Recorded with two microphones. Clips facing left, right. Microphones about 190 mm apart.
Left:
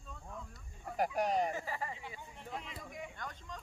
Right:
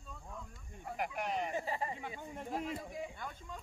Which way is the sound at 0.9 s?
35° left (ahead or behind).